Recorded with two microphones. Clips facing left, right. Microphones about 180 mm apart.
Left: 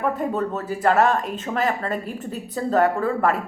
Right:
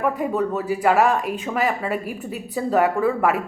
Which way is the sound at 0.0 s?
10° right (ahead or behind).